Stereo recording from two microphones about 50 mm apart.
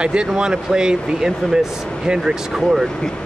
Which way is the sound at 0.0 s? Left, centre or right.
Centre.